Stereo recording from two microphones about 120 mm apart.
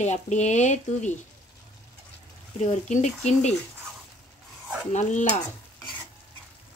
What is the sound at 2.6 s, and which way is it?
Speech, 80° left.